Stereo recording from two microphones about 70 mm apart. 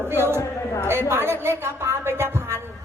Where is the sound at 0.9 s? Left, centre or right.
Right.